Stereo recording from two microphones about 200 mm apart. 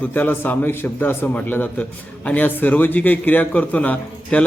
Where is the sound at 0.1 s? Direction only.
10° left (ahead or behind).